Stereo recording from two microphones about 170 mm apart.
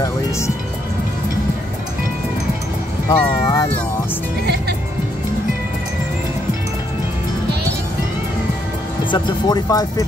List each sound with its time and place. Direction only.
3.1 s music: 25° left (ahead or behind)
9.1 s speech: 25° left (ahead or behind)